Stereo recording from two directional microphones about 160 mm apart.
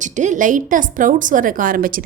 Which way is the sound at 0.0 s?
50° right (ahead or behind).